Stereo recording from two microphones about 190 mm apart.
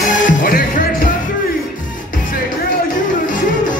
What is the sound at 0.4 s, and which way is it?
Music, 45° left (ahead or behind).